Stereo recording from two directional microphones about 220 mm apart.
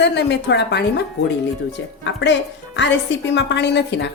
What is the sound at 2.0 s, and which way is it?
A woman's voice, 55° left (ahead or behind).